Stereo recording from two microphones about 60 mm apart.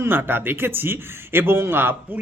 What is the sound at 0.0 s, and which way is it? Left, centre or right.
Speech, right.